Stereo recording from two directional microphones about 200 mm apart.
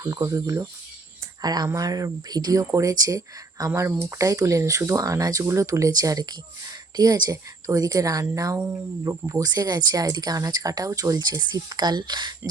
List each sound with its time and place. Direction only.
0.0 s speech: 15° right (ahead or behind)